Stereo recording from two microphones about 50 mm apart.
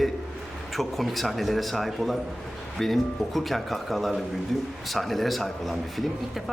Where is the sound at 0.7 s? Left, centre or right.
Centre.